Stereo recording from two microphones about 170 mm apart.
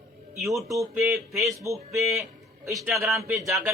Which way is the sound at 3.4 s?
Centre (ahead or behind).